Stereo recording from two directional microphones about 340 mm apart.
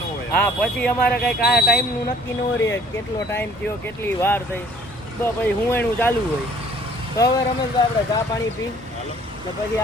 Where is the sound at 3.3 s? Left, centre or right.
Centre.